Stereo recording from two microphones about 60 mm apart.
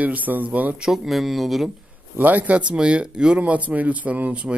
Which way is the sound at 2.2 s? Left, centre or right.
Right.